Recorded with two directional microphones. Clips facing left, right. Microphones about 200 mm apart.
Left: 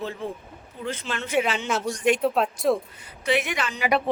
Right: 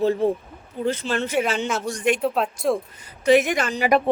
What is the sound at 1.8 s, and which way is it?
Speech, 50° right (ahead or behind).